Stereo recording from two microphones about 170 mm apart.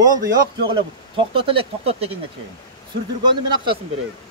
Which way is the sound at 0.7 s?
30° right (ahead or behind).